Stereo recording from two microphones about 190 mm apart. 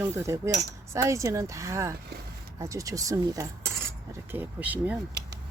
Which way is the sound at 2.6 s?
15° right (ahead or behind).